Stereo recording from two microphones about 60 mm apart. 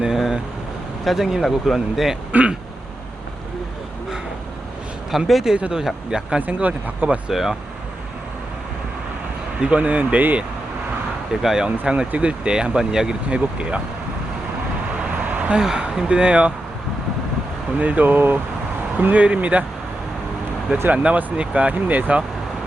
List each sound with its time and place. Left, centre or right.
0.0 s vehicle: centre
1.0 s speech: centre
2.3 s speech: right
5.1 s speech: centre
5.5 s speech: centre
6.4 s speech: right
7.3 s speech: centre
9.6 s speech: centre
11.3 s speech: centre
15.2 s vehicle: right
15.5 s speech: centre
17.7 s speech: right
19.1 s speech: right
20.9 s speech: right